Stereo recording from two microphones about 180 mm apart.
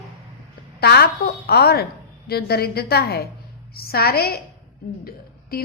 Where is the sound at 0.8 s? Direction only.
60° left (ahead or behind).